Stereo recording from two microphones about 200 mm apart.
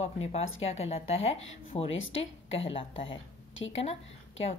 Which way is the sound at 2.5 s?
30° left (ahead or behind).